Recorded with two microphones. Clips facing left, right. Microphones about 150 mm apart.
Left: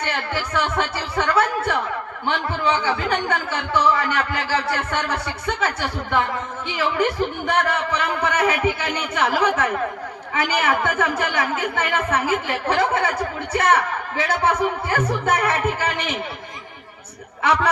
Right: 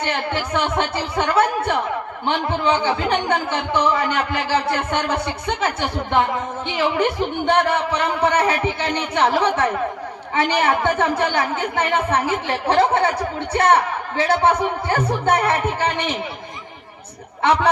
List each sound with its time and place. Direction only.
0.0 s a woman's voice: 20° right (ahead or behind)